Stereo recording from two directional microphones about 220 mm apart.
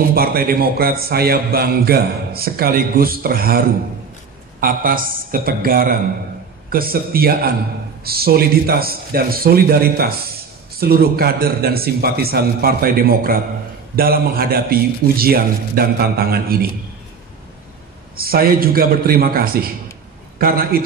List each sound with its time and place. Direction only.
0.1 s a man's voice: 45° right (ahead or behind)
18.1 s a man's voice: 40° right (ahead or behind)